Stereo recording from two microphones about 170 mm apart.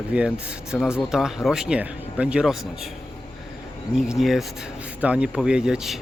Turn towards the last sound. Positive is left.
turn(degrees=-5)  # may be behind; listen again after turning